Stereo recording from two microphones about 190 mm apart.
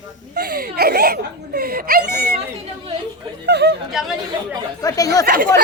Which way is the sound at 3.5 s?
60° right (ahead or behind).